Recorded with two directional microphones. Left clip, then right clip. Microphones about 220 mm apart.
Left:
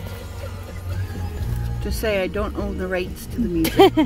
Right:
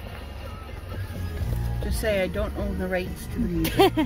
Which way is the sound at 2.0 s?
15° left (ahead or behind).